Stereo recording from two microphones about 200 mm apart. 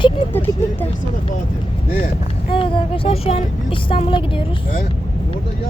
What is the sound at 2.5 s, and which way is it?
Speech, 25° left (ahead or behind).